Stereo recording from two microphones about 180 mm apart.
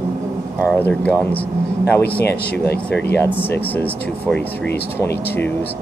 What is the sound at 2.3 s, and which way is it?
Speech, 65° left (ahead or behind).